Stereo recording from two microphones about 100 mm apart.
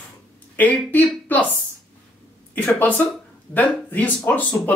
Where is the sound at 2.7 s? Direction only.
20° left (ahead or behind).